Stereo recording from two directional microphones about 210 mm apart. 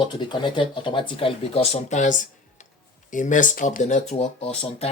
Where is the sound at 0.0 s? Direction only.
20° left (ahead or behind).